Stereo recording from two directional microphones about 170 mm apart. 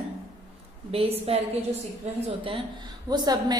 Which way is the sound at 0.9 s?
35° right (ahead or behind).